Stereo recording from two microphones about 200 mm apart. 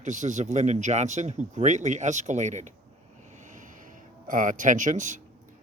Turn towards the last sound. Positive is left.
turn(degrees=-40)  # may be behind; listen again after turning